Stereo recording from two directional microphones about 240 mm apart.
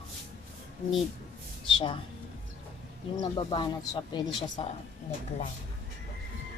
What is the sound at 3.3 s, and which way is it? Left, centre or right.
Speech, centre.